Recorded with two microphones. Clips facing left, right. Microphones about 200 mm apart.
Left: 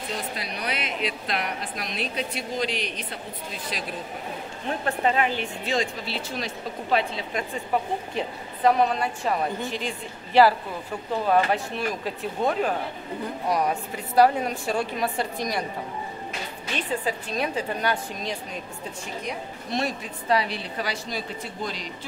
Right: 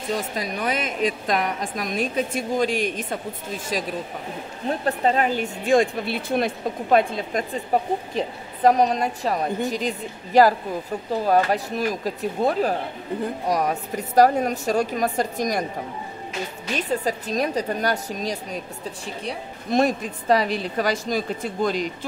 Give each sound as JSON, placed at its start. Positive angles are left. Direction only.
{"t": 0.1, "sound": "a woman's voice", "side_deg": -45}
{"t": 4.6, "sound": "a woman's voice", "side_deg": -35}
{"t": 16.7, "sound": "speech", "side_deg": -40}
{"t": 19.7, "sound": "a woman's voice", "side_deg": -45}